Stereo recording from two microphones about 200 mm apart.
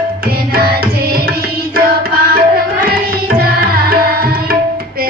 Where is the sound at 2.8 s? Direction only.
45° right (ahead or behind).